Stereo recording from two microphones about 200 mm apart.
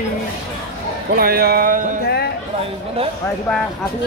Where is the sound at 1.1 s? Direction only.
50° right (ahead or behind).